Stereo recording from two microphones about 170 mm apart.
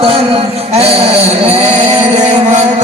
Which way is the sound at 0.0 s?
35° right (ahead or behind).